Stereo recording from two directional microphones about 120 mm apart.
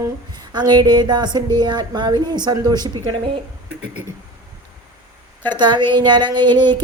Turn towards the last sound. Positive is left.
turn(degrees=-40)  # may be behind; listen again after turning